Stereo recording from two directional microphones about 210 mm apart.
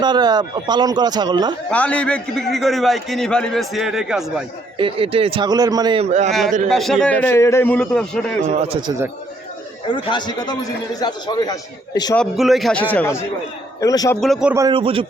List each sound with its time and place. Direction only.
0.0 s a man's voice: 20° right (ahead or behind)
1.7 s a man's voice: 5° left (ahead or behind)
4.8 s a man's voice: 25° right (ahead or behind)
6.7 s a man's voice: centre (ahead or behind)
8.4 s a man's voice: 30° right (ahead or behind)
9.8 s a man's voice: 20° left (ahead or behind)
12.1 s a man's voice: centre (ahead or behind); by 14.2 s 15° left (ahead or behind)
14.2 s a man's voice: centre (ahead or behind)
14.7 s a man's voice: 25° right (ahead or behind)